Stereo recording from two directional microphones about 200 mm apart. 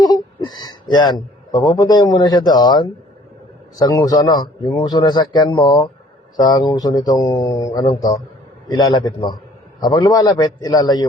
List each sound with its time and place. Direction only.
0.0 s a man's voice: 20° left (ahead or behind)